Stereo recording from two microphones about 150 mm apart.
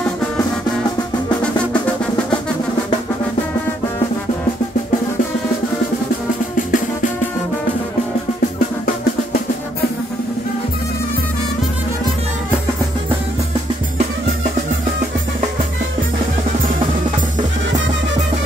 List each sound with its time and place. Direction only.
6.5 s music: 60° left (ahead or behind)